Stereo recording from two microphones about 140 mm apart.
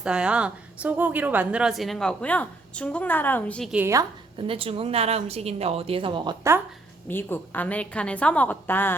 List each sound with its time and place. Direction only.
0.0 s a woman's voice: 5° right (ahead or behind); by 3.6 s 15° left (ahead or behind)
3.6 s a woman's voice: 5° right (ahead or behind)
4.4 s speech: 40° right (ahead or behind)
7.1 s a woman's voice: 15° left (ahead or behind)